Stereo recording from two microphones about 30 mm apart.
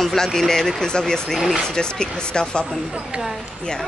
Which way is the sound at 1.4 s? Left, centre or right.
Centre.